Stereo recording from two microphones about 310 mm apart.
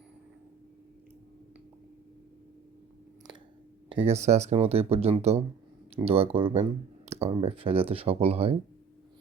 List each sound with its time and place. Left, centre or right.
3.8 s speech: centre